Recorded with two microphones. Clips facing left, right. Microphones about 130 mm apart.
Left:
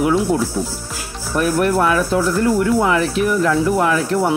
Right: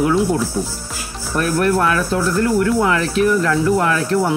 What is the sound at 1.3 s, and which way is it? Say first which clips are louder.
Speech: left 1 dB; 15° left (ahead or behind).